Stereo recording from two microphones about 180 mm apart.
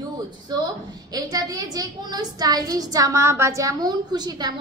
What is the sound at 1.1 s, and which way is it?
A woman's voice, 20° right (ahead or behind).